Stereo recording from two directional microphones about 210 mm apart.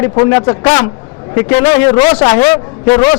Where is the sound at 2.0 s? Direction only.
25° left (ahead or behind).